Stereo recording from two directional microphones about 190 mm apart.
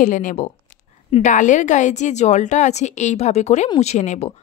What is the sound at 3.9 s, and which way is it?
Speech, 35° left (ahead or behind).